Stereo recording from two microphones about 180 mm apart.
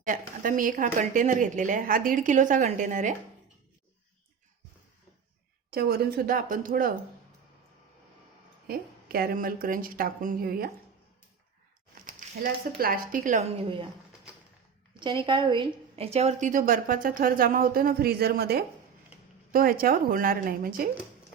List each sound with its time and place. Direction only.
0.0 s a woman's voice: 50° right (ahead or behind)
5.7 s a woman's voice: 60° right (ahead or behind)
8.6 s a woman's voice: 55° right (ahead or behind)
12.0 s speech: 55° right (ahead or behind)
13.6 s speech: 30° right (ahead or behind)
14.9 s a woman's voice: 25° right (ahead or behind); by 20.9 s 55° right (ahead or behind)